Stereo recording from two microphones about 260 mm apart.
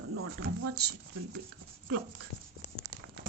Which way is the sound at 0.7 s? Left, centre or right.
Right.